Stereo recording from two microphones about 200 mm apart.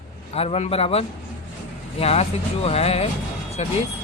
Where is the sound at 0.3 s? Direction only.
30° left (ahead or behind).